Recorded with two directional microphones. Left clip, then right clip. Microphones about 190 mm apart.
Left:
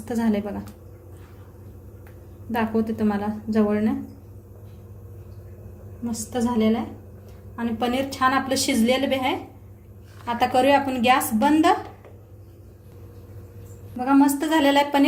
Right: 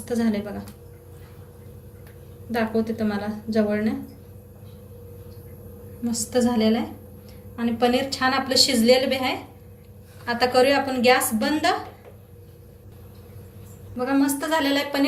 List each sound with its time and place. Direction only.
0.0 s a woman's voice: 50° left (ahead or behind)
2.5 s a woman's voice: 45° left (ahead or behind)
6.1 s a woman's voice: 30° left (ahead or behind); by 11.7 s 50° left (ahead or behind)
14.0 s a sound: 55° left (ahead or behind)